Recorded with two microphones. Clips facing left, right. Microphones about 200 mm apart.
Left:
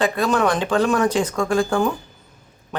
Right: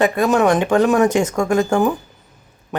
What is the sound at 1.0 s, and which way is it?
Speech, 45° right (ahead or behind).